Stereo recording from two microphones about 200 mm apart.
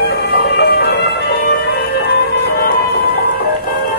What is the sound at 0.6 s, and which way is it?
Music, 55° left (ahead or behind).